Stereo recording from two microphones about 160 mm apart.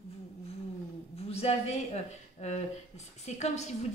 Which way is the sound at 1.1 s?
40° left (ahead or behind).